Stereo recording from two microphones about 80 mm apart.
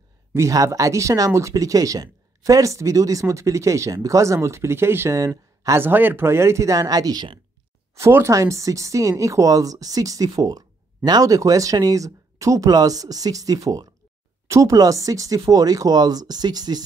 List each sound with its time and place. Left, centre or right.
0.5 s speech: right
5.2 s speech: right
5.8 s speech: right
7.9 s speech: right